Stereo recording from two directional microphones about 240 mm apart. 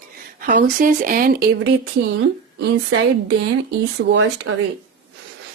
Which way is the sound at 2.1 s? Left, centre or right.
Right.